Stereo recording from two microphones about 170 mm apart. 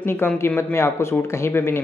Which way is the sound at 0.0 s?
15° left (ahead or behind).